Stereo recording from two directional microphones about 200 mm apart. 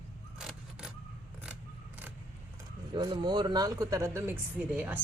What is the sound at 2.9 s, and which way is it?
Speech, 20° right (ahead or behind).